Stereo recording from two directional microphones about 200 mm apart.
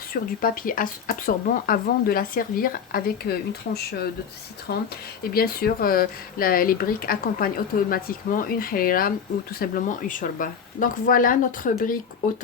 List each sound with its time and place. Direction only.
0.1 s speech: 45° left (ahead or behind)